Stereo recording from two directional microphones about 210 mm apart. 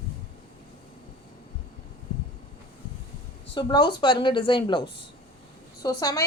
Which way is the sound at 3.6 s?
20° left (ahead or behind).